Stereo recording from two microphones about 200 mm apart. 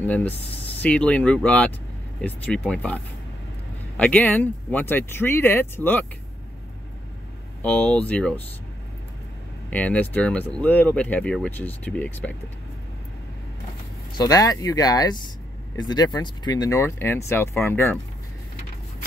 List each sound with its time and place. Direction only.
0.0 s speech: 10° left (ahead or behind)
7.6 s speech: 5° left (ahead or behind)
9.7 s speech: 10° left (ahead or behind)
14.1 s speech: 20° left (ahead or behind)